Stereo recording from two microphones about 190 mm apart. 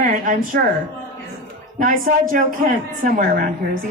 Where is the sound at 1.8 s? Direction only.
45° right (ahead or behind).